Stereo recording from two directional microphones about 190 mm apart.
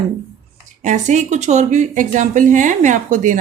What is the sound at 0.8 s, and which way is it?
Speech, 40° right (ahead or behind).